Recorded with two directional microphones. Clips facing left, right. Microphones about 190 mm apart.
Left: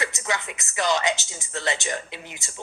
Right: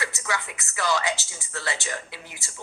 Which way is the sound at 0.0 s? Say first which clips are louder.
Left 2 dB; 20° left (ahead or behind).